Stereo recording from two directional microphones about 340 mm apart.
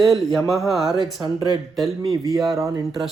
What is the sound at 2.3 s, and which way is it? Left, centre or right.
Speech, centre.